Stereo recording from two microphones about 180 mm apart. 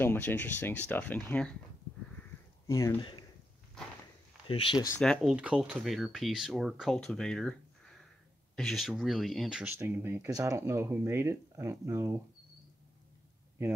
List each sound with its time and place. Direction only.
0.0 s speech: 10° left (ahead or behind)
2.6 s speech: 15° left (ahead or behind)
4.5 s speech: 30° left (ahead or behind)
5.0 s speech: centre (ahead or behind); by 12.2 s 15° right (ahead or behind)